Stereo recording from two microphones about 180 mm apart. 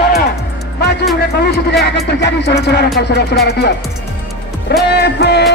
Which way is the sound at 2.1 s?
70° left (ahead or behind).